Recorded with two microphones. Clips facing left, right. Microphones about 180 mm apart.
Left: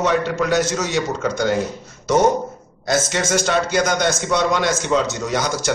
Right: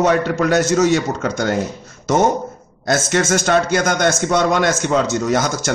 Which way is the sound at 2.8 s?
50° right (ahead or behind).